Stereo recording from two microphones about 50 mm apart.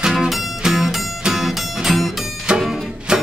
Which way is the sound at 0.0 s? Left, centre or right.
Centre.